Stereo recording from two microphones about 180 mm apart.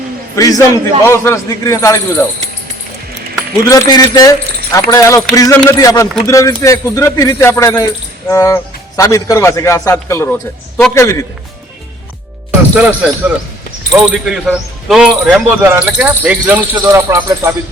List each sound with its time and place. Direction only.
0.3 s speech: 20° left (ahead or behind)
3.7 s speech: 20° left (ahead or behind)
12.7 s speech: 5° right (ahead or behind)